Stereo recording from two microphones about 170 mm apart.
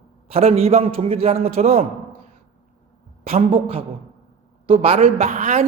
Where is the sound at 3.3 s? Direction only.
35° right (ahead or behind).